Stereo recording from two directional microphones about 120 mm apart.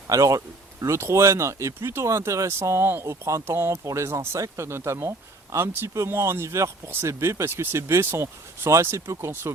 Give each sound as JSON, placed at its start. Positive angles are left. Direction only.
{"t": 0.1, "sound": "speech", "side_deg": -25}